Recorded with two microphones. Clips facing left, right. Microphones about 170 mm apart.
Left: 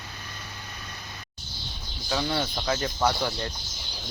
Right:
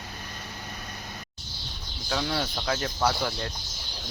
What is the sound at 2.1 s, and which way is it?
Speech, centre (ahead or behind).